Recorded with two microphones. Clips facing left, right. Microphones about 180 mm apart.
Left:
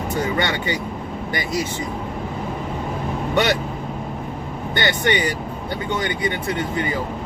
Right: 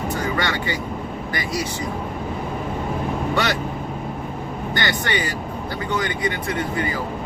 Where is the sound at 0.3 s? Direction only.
20° left (ahead or behind).